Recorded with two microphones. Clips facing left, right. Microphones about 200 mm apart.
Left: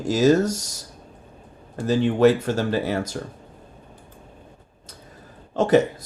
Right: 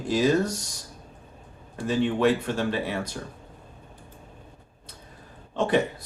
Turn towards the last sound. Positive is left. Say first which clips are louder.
# left 6 dB
turn(degrees=45)  # may be behind; listen again after turning